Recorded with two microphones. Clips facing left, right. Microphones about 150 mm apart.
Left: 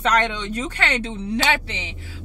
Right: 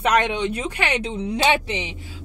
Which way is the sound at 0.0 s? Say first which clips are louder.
Right 2 dB; 10° right (ahead or behind).